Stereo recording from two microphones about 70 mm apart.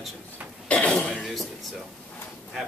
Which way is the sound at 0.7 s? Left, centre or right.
Centre.